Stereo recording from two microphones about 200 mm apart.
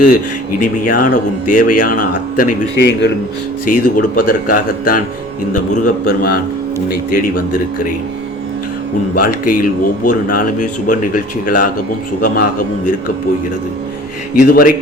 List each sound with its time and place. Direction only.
0.6 s speech: 45° left (ahead or behind)
2.7 s a man's voice: 60° left (ahead or behind)
3.7 s a man's voice: 45° left (ahead or behind)
9.2 s speech: 45° left (ahead or behind)
14.3 s speech: 45° left (ahead or behind)